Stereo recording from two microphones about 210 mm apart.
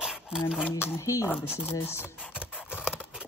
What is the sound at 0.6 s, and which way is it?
Speech, 10° left (ahead or behind).